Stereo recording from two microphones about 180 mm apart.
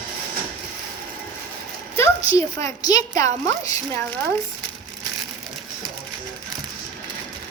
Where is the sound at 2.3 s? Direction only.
20° left (ahead or behind).